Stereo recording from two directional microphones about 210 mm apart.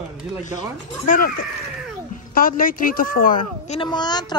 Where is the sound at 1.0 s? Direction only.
40° left (ahead or behind).